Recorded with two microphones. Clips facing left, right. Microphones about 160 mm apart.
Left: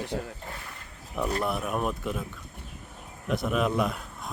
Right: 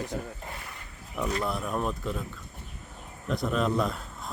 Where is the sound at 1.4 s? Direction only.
15° left (ahead or behind).